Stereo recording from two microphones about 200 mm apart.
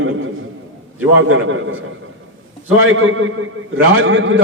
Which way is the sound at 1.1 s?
80° right.